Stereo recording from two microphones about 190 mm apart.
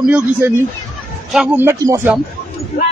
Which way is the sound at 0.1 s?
10° right (ahead or behind).